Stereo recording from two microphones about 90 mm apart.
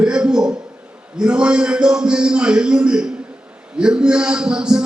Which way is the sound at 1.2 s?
10° right (ahead or behind).